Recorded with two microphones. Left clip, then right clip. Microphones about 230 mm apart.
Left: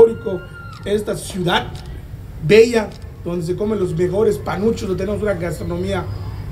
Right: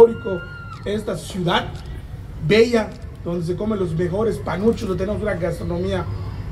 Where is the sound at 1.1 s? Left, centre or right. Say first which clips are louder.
Left 2 dB; left.